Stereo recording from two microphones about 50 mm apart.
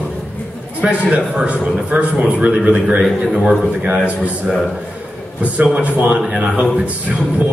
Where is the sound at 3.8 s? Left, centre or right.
Right.